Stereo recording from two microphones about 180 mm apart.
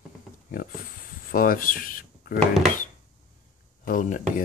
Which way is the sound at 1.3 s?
50° left (ahead or behind).